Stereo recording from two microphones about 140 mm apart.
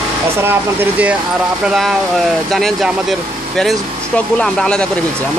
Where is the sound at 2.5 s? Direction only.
Centre (ahead or behind).